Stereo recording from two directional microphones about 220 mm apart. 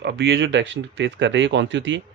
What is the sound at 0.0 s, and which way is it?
Speech, 55° right (ahead or behind).